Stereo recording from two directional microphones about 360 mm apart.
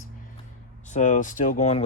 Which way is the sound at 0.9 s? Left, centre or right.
Centre.